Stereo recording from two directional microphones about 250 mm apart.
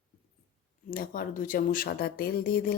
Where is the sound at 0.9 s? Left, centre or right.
Left.